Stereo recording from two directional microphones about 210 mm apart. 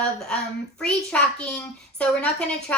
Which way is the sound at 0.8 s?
5° left (ahead or behind).